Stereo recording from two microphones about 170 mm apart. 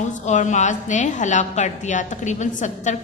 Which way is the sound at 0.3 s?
45° left (ahead or behind).